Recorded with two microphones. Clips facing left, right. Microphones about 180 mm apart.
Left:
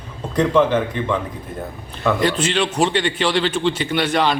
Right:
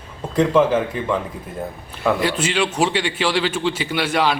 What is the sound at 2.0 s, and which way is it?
Speech, 5° right (ahead or behind).